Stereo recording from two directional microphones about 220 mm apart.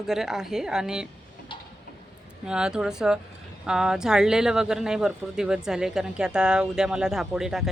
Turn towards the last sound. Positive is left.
turn(degrees=0)  # may be behind; listen again after turning